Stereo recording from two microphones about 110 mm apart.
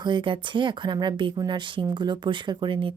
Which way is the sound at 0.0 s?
45° right (ahead or behind).